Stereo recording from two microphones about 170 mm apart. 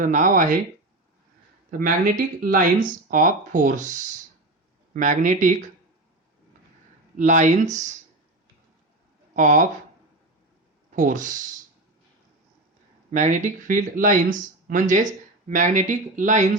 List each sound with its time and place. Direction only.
0.0 s speech: 50° right (ahead or behind)
1.8 s speech: 55° right (ahead or behind)
4.9 s speech: 50° right (ahead or behind)
7.2 s speech: 45° right (ahead or behind)
9.3 s speech: 50° right (ahead or behind)
10.9 s speech: 50° right (ahead or behind)
13.1 s speech: 45° right (ahead or behind)